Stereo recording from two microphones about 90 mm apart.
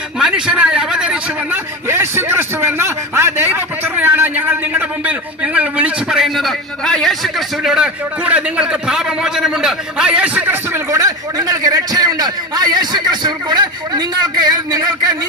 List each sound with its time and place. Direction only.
0.2 s a man's voice: 10° right (ahead or behind)
1.9 s a man's voice: 30° right (ahead or behind)
6.1 s a man's voice: centre (ahead or behind); by 10.8 s 25° right (ahead or behind)
10.8 s a man's voice: 40° right (ahead or behind)